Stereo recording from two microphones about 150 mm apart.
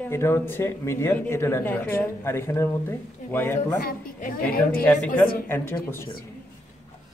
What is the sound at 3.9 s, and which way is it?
Speech, 70° left (ahead or behind).